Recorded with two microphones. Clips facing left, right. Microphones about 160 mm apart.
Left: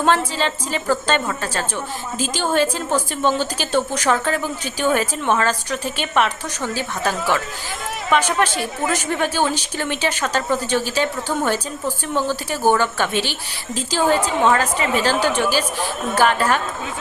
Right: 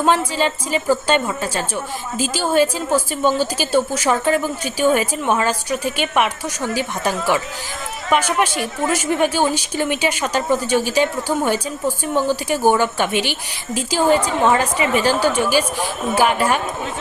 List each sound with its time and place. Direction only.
0.3 s a woman's voice: 15° right (ahead or behind)
8.9 s a woman's voice: 10° right (ahead or behind)